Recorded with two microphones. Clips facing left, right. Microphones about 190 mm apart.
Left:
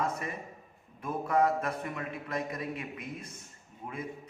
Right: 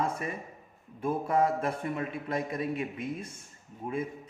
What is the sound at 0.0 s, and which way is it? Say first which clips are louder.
A man's voice: right 2 dB; 30° right (ahead or behind).